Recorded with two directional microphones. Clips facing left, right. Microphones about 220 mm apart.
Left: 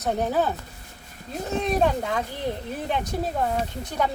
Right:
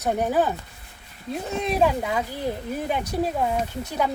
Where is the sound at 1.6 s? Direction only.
5° right (ahead or behind).